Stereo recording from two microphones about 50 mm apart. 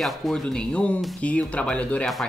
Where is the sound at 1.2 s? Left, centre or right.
Left.